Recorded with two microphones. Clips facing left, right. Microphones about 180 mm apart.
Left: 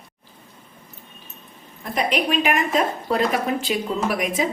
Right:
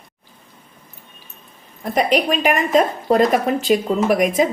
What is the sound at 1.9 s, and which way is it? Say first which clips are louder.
A woman's voice: right 4 dB; 45° right (ahead or behind).